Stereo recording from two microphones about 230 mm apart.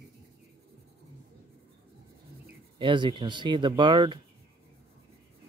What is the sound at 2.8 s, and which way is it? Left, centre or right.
Speech, right.